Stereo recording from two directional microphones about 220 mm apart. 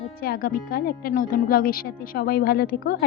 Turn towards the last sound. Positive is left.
turn(degrees=45)  # may be behind; listen again after turning